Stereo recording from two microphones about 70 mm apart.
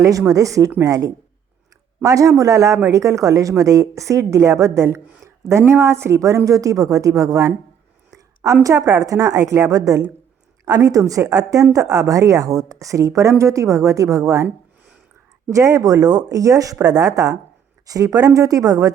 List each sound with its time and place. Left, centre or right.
0.0 s a woman's voice: right
8.6 s a woman's voice: right
15.4 s speech: right